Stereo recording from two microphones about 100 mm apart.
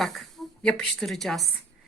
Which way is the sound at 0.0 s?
Centre (ahead or behind).